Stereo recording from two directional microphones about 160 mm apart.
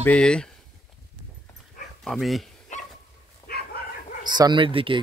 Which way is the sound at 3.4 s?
70° left (ahead or behind).